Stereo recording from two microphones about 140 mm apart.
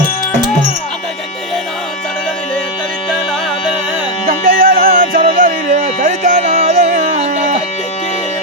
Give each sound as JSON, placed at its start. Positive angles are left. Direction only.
{"t": 4.3, "sound": "music", "side_deg": -90}
{"t": 6.9, "sound": "music", "side_deg": -90}